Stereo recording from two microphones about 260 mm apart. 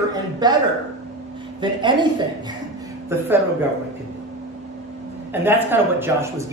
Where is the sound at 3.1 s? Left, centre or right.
Centre.